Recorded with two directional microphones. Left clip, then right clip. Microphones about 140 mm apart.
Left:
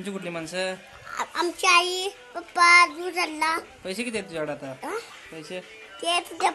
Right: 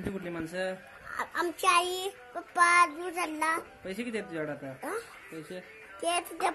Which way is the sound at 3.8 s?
50° left (ahead or behind).